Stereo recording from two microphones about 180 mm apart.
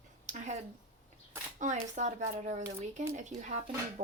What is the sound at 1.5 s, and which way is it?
A woman's voice, 45° right (ahead or behind).